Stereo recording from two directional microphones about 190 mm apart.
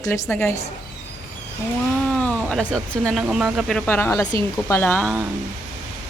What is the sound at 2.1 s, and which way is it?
Speech, 5° left (ahead or behind).